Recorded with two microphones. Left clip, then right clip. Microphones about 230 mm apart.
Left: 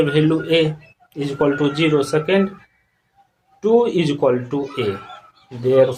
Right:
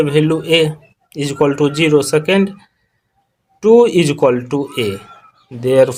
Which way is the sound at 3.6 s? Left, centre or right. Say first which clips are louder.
Right 6 dB; right.